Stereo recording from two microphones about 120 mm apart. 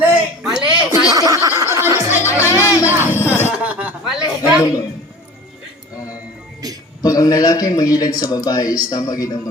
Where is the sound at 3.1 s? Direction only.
20° left (ahead or behind).